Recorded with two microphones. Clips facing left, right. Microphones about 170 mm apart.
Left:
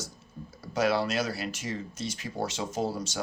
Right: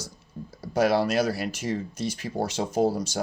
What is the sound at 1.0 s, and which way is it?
Speech, 45° right (ahead or behind).